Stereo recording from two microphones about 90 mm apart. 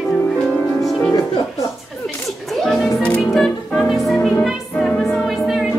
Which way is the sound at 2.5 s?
5° left (ahead or behind).